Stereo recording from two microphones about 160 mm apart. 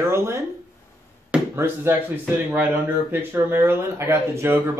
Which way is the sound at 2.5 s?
10° right (ahead or behind).